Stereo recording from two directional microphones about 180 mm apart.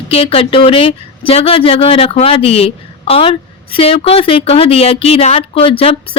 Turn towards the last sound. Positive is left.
turn(degrees=30)  # may be behind; listen again after turning